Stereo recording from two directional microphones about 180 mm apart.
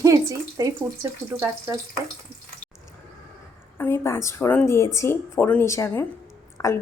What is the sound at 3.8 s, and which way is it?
A woman's voice, 15° left (ahead or behind).